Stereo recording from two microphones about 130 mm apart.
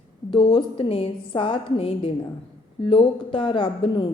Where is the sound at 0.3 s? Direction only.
40° left (ahead or behind).